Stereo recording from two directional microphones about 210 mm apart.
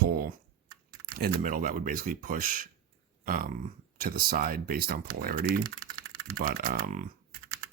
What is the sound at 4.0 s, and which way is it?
Speech, 45° right (ahead or behind).